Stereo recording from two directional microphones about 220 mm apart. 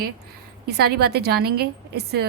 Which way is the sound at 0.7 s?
45° right (ahead or behind).